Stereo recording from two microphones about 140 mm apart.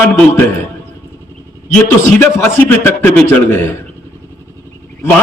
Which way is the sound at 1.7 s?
15° left (ahead or behind).